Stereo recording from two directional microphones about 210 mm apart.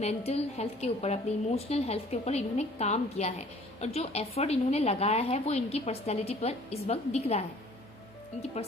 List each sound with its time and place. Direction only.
0.0 s a woman's voice: 30° left (ahead or behind)